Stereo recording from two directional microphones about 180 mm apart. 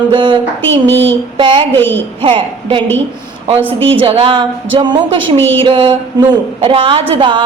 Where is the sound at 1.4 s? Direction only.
25° right (ahead or behind).